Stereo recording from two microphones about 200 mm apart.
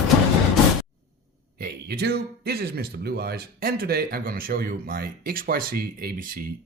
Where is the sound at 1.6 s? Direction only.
50° right (ahead or behind).